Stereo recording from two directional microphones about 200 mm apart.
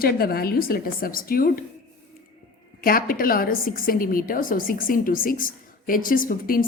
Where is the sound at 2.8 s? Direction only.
45° left (ahead or behind).